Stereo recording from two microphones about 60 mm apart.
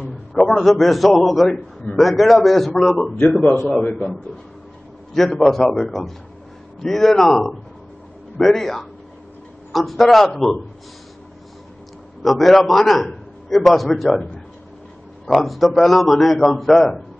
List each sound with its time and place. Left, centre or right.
0.4 s a man's voice: centre
3.1 s speech: centre
3.9 s a man's voice: centre
12.2 s a man's voice: centre
15.4 s a man's voice: centre